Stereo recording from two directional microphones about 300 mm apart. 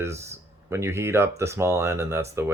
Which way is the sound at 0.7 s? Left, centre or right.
Centre.